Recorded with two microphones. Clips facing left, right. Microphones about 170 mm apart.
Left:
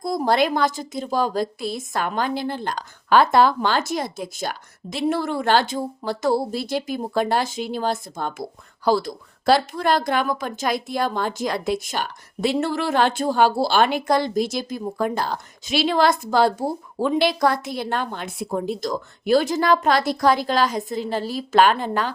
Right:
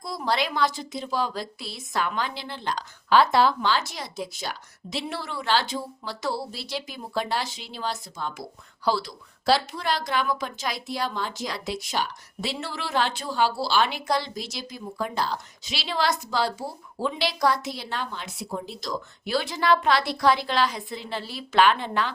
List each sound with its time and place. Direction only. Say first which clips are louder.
0.0 s a woman's voice: left 7 dB; 45° left (ahead or behind)